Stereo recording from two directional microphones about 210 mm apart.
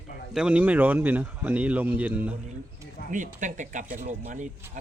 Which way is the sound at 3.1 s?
35° right (ahead or behind).